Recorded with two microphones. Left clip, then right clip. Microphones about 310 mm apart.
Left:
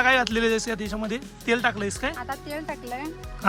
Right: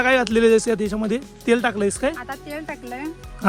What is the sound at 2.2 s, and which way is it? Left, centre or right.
Speech, left.